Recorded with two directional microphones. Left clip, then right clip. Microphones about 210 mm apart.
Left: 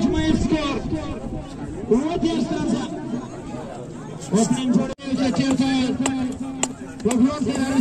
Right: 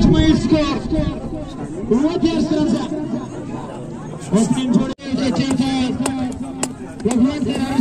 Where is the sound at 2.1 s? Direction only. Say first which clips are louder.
Right 5 dB; 40° right (ahead or behind).